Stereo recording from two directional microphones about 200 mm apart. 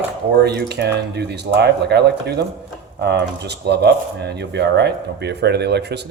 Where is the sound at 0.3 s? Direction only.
55° right (ahead or behind).